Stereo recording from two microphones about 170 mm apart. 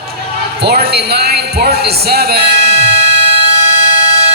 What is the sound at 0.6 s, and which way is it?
Speech, 70° right (ahead or behind).